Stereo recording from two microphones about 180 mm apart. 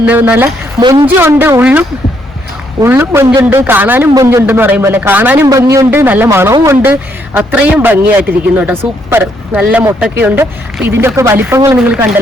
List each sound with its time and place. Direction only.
0.0 s a man's voice: 10° right (ahead or behind)
0.8 s a woman's voice: 25° right (ahead or behind)
1.0 s a man's voice: 10° right (ahead or behind)
2.8 s a man's voice: 15° right (ahead or behind)